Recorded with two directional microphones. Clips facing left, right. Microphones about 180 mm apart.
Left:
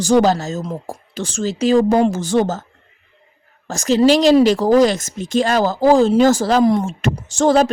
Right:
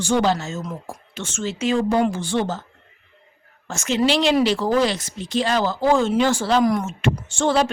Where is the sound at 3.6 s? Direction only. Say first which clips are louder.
Left 7 dB; 35° left (ahead or behind).